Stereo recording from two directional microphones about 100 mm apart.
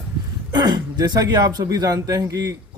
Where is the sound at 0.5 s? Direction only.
40° right (ahead or behind).